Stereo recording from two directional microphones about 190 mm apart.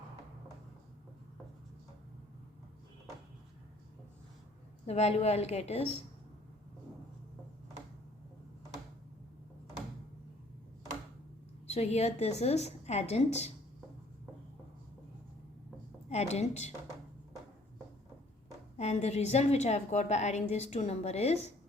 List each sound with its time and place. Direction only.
4.9 s a woman's voice: 35° left (ahead or behind)
11.7 s a woman's voice: 35° left (ahead or behind)
16.0 s a woman's voice: 35° left (ahead or behind)
18.8 s a woman's voice: 35° left (ahead or behind)